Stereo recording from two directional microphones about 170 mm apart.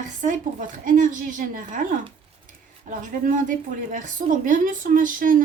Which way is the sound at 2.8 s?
50° right (ahead or behind).